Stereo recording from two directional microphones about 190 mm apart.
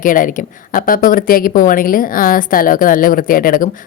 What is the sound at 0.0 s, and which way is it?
A woman's voice, 45° left (ahead or behind).